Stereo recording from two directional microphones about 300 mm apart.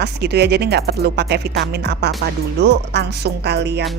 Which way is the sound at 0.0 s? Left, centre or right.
Right.